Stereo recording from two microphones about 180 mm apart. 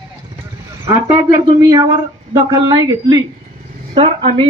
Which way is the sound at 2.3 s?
25° right (ahead or behind).